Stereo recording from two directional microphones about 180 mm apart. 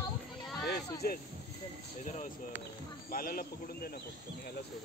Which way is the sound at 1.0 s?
55° left (ahead or behind).